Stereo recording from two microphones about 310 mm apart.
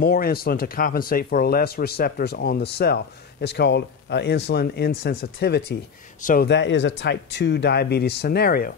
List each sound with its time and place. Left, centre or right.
0.0 s speech: left